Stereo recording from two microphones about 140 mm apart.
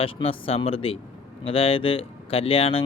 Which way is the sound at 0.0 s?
40° left (ahead or behind).